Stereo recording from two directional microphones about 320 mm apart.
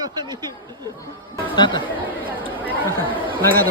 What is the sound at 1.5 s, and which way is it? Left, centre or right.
Speech, centre.